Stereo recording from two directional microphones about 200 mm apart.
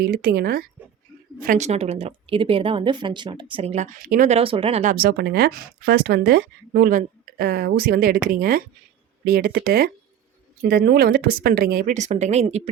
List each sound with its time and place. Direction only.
0.0 s a woman's voice: 50° right (ahead or behind); by 3.8 s 30° right (ahead or behind)
3.9 s speech: 40° right (ahead or behind)